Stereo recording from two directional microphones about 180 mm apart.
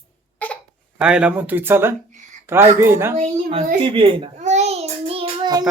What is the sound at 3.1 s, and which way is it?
Speech, 35° right (ahead or behind).